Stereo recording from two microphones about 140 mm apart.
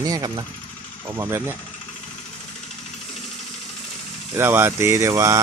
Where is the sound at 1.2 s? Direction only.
15° right (ahead or behind).